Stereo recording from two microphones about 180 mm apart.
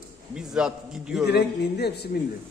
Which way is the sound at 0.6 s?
5° right (ahead or behind).